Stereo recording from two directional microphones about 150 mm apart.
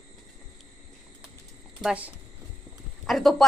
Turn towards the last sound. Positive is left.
turn(degrees=0)  # may be behind; listen again after turning